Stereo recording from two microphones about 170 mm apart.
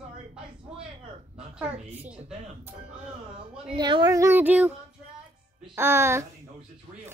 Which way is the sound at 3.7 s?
30° right (ahead or behind).